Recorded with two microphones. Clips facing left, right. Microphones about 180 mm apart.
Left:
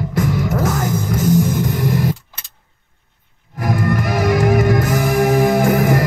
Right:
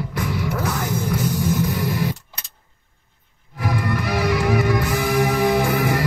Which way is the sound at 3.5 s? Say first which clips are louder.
Left 5 dB; 45° left (ahead or behind).